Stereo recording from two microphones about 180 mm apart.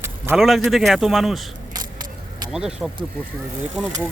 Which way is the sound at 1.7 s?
25° right (ahead or behind).